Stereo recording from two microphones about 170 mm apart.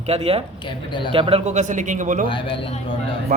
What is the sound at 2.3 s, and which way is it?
Speech, 30° left (ahead or behind).